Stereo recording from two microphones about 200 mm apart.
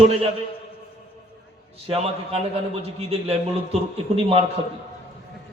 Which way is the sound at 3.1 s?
30° right (ahead or behind).